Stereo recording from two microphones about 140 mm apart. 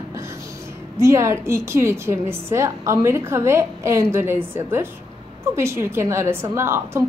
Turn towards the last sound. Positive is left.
turn(degrees=-20)  # may be behind; listen again after turning